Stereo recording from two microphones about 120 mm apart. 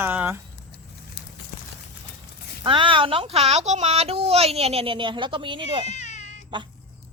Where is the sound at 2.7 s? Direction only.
45° right (ahead or behind).